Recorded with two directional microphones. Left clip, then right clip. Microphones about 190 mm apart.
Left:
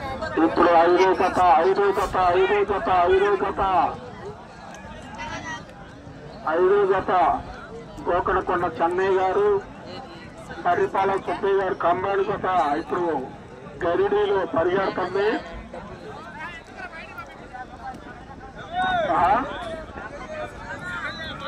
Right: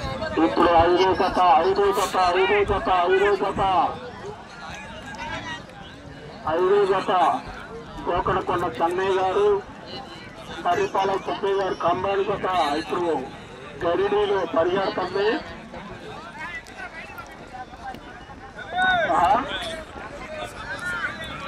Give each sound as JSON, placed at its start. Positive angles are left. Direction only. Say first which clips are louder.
{"t": 0.2, "sound": "a man's voice", "louder": "even", "side_deg": -25}
{"t": 6.4, "sound": "a man's voice", "louder": "left 1 dB", "side_deg": -20}
{"t": 10.6, "sound": "a man's voice", "louder": "left 1 dB", "side_deg": -25}
{"t": 19.1, "sound": "a man's voice", "louder": "even", "side_deg": -20}